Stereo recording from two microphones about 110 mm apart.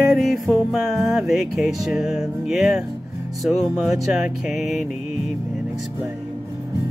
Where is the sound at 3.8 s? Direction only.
5° right (ahead or behind).